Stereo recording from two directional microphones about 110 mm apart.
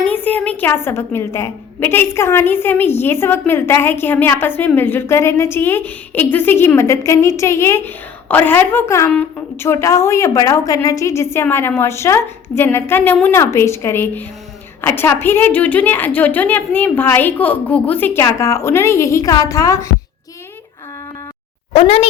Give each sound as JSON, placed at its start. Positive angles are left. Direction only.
{"t": 0.0, "sound": "a woman's voice", "side_deg": 15}
{"t": 21.7, "sound": "a woman's voice", "side_deg": 70}